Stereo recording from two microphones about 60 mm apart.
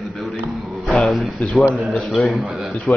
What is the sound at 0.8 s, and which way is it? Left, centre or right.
Speech, centre.